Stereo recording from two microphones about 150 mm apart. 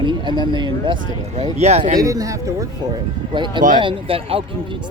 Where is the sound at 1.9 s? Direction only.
25° right (ahead or behind).